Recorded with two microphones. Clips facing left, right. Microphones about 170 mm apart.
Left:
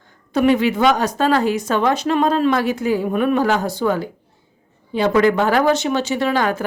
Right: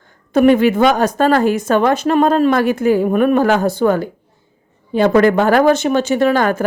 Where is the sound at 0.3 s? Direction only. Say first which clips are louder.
Right 5 dB; 50° right (ahead or behind).